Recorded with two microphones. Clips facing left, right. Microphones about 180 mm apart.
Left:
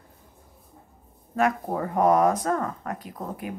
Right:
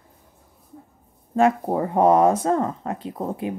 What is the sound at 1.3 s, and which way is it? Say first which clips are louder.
Speech: right 5 dB; 25° right (ahead or behind).